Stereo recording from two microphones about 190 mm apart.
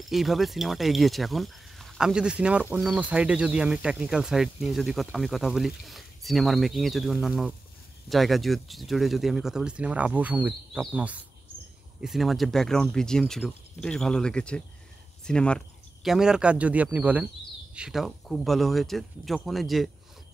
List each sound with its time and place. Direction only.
0.1 s speech: centre (ahead or behind)